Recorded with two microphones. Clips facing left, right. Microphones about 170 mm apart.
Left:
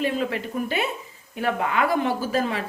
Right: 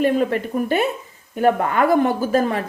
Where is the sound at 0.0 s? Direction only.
50° right (ahead or behind).